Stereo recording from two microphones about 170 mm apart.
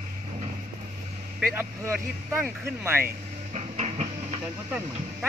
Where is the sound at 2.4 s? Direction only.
15° right (ahead or behind).